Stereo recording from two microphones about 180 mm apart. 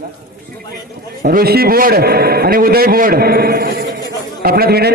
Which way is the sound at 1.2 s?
55° right (ahead or behind).